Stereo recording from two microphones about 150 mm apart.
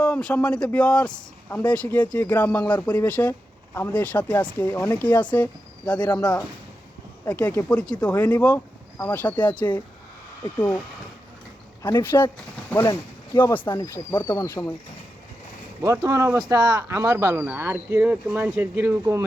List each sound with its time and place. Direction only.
0.0 s speech: 5° left (ahead or behind)
11.8 s speech: 20° left (ahead or behind)
13.4 s speech: 15° left (ahead or behind)
15.8 s speech: 20° right (ahead or behind)
16.4 s speech: 30° right (ahead or behind)
16.9 s speech: 15° right (ahead or behind)